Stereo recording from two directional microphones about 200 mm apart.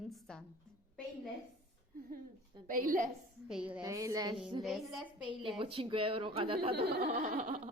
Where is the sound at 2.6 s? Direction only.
45° right (ahead or behind).